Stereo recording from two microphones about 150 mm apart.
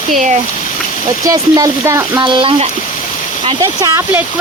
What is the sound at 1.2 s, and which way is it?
Speech, 20° right (ahead or behind).